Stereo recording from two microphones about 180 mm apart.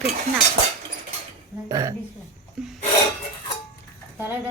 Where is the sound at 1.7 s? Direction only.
20° right (ahead or behind).